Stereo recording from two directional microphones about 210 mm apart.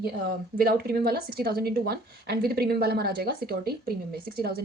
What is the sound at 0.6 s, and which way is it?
A woman's voice, 45° right (ahead or behind).